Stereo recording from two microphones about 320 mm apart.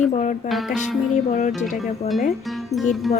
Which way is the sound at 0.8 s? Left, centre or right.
Left.